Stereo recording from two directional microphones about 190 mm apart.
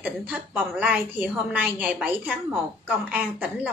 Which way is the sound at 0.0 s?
5° right (ahead or behind).